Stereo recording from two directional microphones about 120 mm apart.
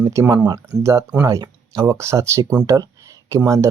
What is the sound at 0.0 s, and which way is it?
Speech, 25° right (ahead or behind).